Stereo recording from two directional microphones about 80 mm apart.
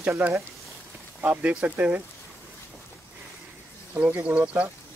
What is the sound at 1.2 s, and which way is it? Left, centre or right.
Speech, centre.